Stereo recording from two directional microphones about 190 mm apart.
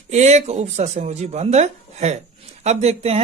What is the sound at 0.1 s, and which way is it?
A man's voice, 35° right (ahead or behind).